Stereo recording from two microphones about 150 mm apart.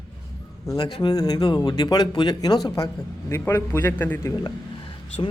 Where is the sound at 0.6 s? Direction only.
30° left (ahead or behind); by 4.3 s 15° left (ahead or behind).